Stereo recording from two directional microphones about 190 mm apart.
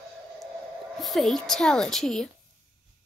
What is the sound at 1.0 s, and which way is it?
Speech, centre (ahead or behind).